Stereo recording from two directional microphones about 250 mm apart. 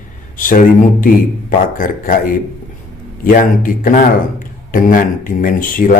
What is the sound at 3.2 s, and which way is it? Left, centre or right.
A man's voice, left.